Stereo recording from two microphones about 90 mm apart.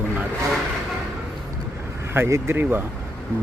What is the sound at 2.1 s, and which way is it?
Speech, 30° right (ahead or behind).